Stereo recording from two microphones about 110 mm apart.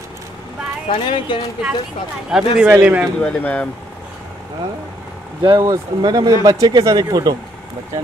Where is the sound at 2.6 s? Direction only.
15° right (ahead or behind).